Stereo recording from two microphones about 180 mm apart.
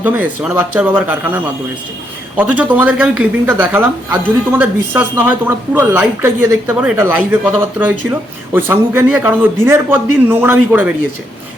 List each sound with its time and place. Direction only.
0.0 s speech: 10° right (ahead or behind)
2.4 s speech: 10° right (ahead or behind)